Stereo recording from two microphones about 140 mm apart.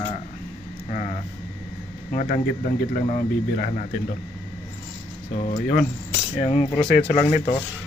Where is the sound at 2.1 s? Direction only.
70° left (ahead or behind); by 3.7 s 90° left.